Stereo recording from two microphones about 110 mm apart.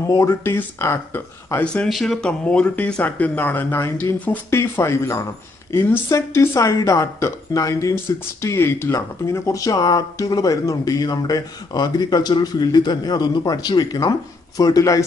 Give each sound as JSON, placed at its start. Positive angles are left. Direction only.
{"t": 0.0, "sound": "speech", "side_deg": 30}
{"t": 1.6, "sound": "speech", "side_deg": 10}
{"t": 1.9, "sound": "speech", "side_deg": 0}
{"t": 2.4, "sound": "a woman's voice", "side_deg": 15}